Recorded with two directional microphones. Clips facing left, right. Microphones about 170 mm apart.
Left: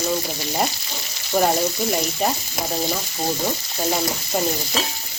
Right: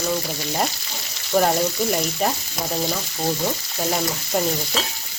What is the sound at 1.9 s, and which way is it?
Stir, 5° left (ahead or behind).